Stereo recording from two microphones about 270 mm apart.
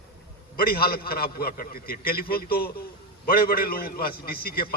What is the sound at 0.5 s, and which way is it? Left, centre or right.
A man's voice, left.